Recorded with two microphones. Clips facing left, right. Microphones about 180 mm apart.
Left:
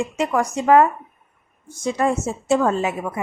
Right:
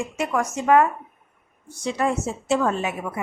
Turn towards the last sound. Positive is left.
turn(degrees=40)  # may be behind; listen again after turning